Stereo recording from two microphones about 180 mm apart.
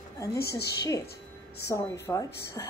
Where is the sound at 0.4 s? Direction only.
65° left (ahead or behind).